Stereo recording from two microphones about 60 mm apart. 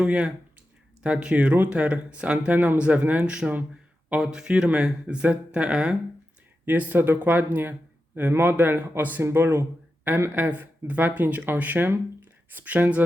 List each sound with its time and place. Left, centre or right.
0.0 s speech: centre
6.7 s speech: right